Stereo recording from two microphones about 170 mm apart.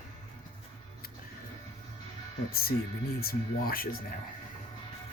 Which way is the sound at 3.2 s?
60° left (ahead or behind).